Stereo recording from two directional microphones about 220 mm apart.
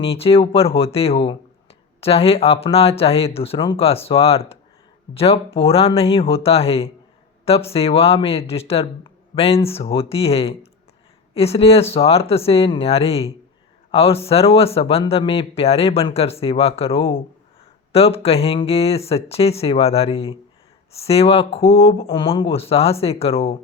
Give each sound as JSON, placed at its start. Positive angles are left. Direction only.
{"t": 0.0, "sound": "speech", "side_deg": 25}